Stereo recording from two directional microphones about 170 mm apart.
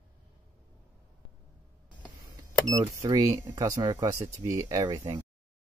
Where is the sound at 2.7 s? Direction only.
25° right (ahead or behind).